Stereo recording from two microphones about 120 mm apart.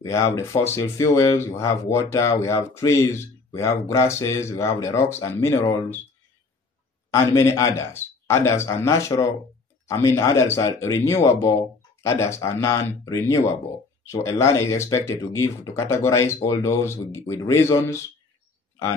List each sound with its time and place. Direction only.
0.0 s speech: 25° left (ahead or behind)
7.1 s speech: 25° left (ahead or behind)